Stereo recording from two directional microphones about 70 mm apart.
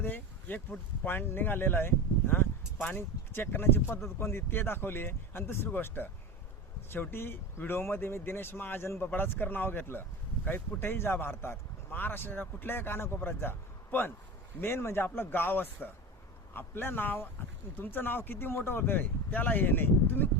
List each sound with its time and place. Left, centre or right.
0.0 s a man's voice: left